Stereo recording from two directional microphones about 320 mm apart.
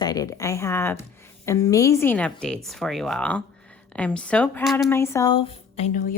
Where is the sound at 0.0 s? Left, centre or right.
Centre.